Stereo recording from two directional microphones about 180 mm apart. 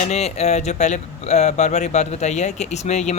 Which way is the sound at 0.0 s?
35° left (ahead or behind).